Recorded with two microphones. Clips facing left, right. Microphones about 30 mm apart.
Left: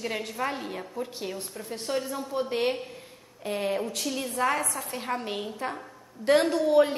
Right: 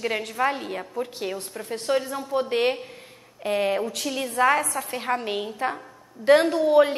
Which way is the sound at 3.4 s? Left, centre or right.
Right.